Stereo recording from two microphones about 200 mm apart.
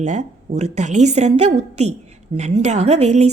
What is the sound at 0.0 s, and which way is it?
A woman's voice, 35° right (ahead or behind).